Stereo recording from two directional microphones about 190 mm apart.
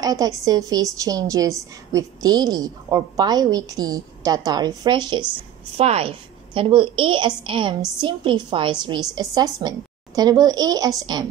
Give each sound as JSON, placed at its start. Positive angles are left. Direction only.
{"t": 0.0, "sound": "a woman's voice", "side_deg": -20}